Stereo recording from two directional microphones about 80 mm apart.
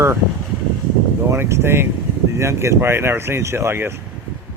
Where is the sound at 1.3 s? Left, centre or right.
Right.